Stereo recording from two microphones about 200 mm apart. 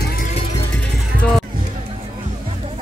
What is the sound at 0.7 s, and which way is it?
Music, 5° left (ahead or behind).